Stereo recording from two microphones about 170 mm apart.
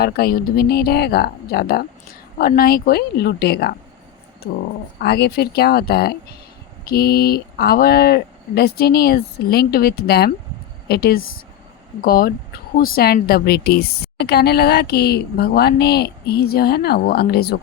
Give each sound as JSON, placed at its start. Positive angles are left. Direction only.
{"t": 0.0, "sound": "a woman's voice", "side_deg": 65}